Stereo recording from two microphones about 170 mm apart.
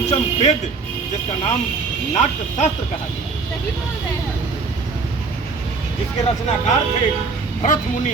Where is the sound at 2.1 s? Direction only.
40° left (ahead or behind).